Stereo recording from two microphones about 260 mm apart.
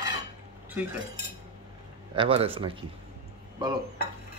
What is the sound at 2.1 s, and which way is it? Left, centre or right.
Speech, right.